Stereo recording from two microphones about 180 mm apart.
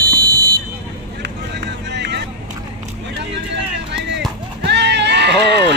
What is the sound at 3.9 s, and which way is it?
Run, 75° right (ahead or behind).